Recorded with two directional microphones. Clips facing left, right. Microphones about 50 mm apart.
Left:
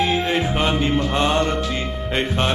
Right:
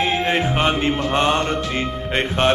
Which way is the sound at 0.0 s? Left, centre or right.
Right.